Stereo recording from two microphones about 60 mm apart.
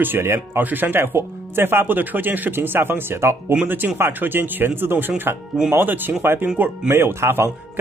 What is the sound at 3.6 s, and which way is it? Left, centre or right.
Speech, right.